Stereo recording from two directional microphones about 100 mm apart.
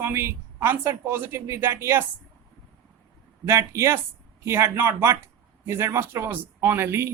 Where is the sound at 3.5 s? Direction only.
30° right (ahead or behind).